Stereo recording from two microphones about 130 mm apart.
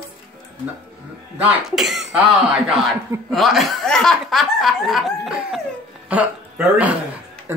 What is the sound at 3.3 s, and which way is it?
Speech, centre (ahead or behind).